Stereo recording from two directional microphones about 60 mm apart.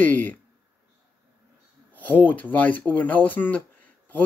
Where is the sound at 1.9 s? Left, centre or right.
Left.